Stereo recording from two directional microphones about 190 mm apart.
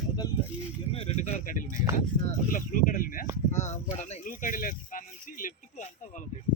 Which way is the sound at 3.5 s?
40° left (ahead or behind).